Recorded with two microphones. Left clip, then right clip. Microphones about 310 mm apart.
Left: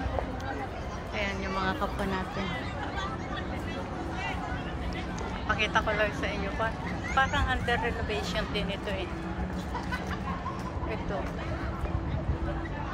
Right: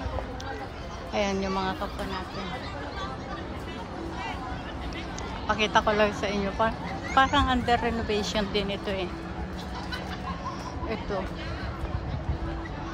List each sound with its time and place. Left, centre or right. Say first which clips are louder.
1.1 s speech: right 5 dB; centre
5.5 s speech: right 4 dB; centre